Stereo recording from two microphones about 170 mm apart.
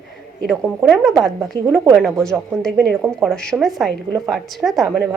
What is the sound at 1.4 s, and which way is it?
Speech, 15° right (ahead or behind).